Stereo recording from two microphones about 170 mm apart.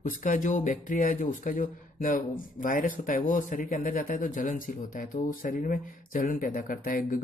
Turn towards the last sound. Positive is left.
turn(degrees=55)  # may be behind; listen again after turning